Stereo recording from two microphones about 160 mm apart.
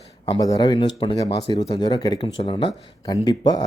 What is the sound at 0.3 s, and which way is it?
Speech, 25° left (ahead or behind).